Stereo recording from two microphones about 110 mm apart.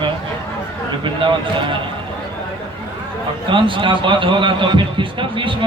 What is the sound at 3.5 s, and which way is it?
A man's voice, 50° right (ahead or behind).